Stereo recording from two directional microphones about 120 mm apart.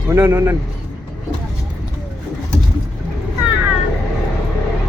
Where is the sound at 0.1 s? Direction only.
25° right (ahead or behind).